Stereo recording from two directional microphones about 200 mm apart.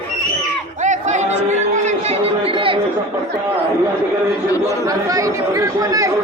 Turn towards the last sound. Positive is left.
turn(degrees=-15)  # may be behind; listen again after turning